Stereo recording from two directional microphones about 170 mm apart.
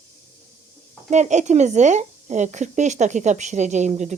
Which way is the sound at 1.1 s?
45° right (ahead or behind).